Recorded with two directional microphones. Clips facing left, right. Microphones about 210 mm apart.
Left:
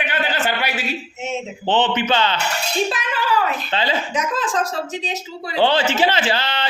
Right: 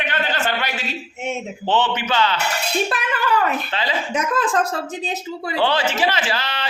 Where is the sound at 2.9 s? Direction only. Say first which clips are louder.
Right 3 dB; 60° right (ahead or behind).